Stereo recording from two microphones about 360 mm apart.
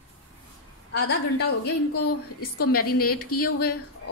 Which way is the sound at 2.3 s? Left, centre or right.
Left.